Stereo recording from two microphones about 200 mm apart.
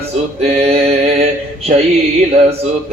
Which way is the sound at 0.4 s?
30° right (ahead or behind).